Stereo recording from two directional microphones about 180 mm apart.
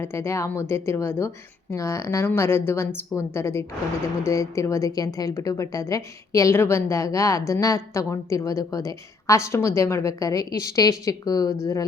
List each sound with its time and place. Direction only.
0.0 s speech: 15° left (ahead or behind)